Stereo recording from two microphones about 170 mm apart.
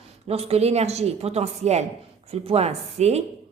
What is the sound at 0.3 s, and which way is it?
A woman's voice, 35° right (ahead or behind).